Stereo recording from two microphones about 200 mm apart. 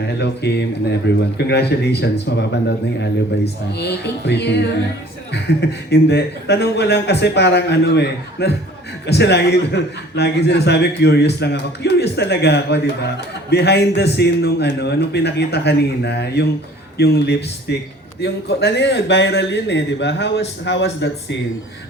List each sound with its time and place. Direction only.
0.2 s a man's voice: 55° left (ahead or behind)